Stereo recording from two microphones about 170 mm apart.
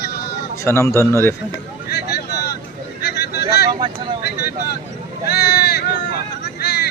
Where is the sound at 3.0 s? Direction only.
75° left (ahead or behind).